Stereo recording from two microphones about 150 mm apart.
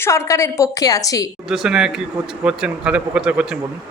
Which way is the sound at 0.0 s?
20° left (ahead or behind).